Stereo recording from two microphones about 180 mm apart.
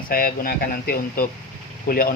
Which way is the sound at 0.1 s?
55° left (ahead or behind).